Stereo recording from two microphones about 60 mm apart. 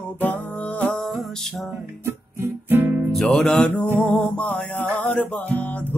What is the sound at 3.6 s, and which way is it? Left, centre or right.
Music, left.